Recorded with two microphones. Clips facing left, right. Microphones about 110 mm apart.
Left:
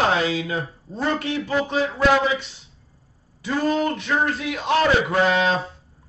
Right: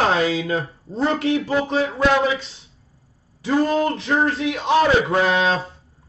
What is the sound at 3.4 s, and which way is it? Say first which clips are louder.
Speech: right 3 dB; 25° right (ahead or behind).